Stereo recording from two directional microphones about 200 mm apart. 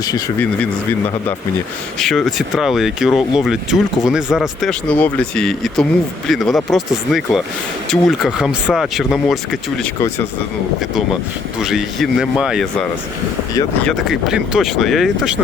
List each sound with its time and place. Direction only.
0.0 s speech: 20° left (ahead or behind)
2.0 s speech: centre (ahead or behind)
11.6 s speech: centre (ahead or behind)
13.8 s speech: centre (ahead or behind)